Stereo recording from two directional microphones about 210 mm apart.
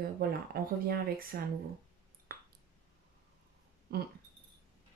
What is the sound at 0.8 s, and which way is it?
Speech, 45° right (ahead or behind).